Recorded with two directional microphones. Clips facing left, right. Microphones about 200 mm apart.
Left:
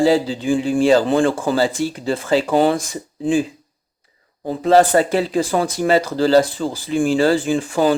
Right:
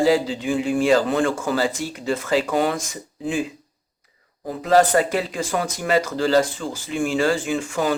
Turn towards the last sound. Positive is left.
turn(degrees=30)  # may be behind; listen again after turning